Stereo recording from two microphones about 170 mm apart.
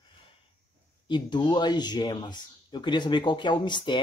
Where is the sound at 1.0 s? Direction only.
25° left (ahead or behind).